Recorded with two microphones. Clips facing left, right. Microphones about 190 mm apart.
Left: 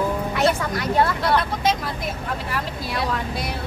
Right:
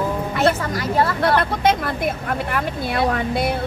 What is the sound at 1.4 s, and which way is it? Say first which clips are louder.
Speech: right 4 dB; 55° right (ahead or behind).